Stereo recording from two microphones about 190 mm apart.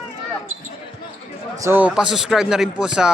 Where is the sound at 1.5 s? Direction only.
15° right (ahead or behind).